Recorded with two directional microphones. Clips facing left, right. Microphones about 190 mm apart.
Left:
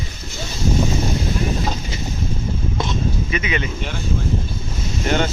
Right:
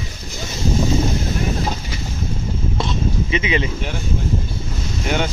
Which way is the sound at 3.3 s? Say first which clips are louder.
Right 3 dB; 25° right (ahead or behind).